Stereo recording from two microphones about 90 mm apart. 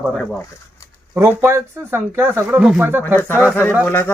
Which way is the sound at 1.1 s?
20° right (ahead or behind).